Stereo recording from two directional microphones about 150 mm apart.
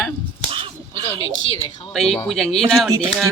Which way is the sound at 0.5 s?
35° right (ahead or behind).